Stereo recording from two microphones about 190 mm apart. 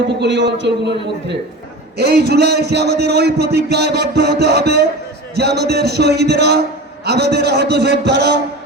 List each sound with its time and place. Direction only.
0.2 s a man's voice: 65° right (ahead or behind)